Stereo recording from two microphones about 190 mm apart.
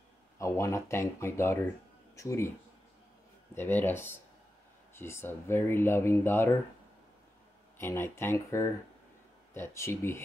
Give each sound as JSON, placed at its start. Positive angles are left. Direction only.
{"t": 0.4, "sound": "speech", "side_deg": 15}
{"t": 3.5, "sound": "speech", "side_deg": 10}
{"t": 7.7, "sound": "speech", "side_deg": 10}